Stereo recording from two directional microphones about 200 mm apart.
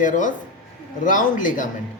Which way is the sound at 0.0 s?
40° left (ahead or behind).